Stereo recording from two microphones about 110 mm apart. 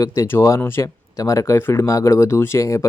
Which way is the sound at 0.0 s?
25° left (ahead or behind).